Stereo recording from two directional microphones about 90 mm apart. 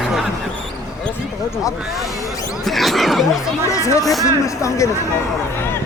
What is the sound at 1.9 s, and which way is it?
Speech, centre (ahead or behind).